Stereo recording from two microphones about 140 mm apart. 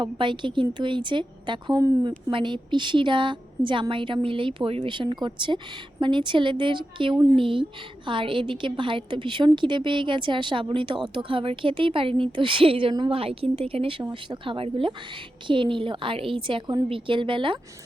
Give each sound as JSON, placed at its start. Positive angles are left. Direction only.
{"t": 0.0, "sound": "a woman's voice", "side_deg": -35}